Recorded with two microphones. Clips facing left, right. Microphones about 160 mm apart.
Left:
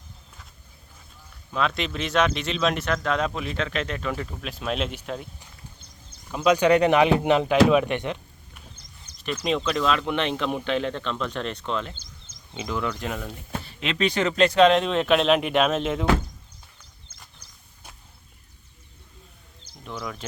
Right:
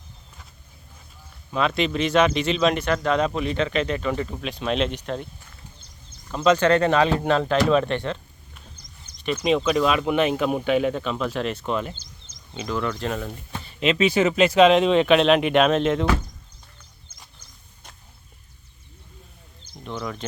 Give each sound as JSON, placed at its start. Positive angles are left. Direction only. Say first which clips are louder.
{"t": 1.5, "sound": "speech", "louder": "right 4 dB", "side_deg": 0}
{"t": 6.3, "sound": "speech", "louder": "right 1 dB", "side_deg": 10}
{"t": 9.2, "sound": "speech", "louder": "right 4 dB", "side_deg": 0}
{"t": 12.5, "sound": "speech", "louder": "right 2 dB", "side_deg": 15}
{"t": 13.7, "sound": "speech", "louder": "right 5 dB", "side_deg": 0}
{"t": 19.8, "sound": "speech", "louder": "right 3 dB", "side_deg": 0}